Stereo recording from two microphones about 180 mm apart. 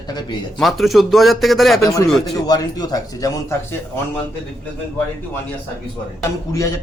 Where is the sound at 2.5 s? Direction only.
20° left (ahead or behind).